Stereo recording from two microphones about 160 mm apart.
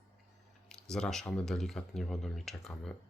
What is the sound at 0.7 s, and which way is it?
Speech, 5° left (ahead or behind).